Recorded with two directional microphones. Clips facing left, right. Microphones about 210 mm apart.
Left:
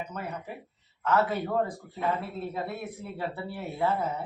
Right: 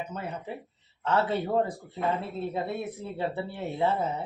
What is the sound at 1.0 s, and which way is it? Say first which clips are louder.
Speech: even; 30° right (ahead or behind).